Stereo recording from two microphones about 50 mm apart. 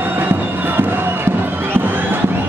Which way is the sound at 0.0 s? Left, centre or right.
Right.